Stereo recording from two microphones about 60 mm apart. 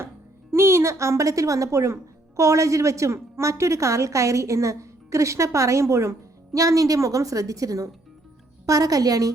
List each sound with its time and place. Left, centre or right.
0.5 s speech: right
8.6 s a woman's voice: right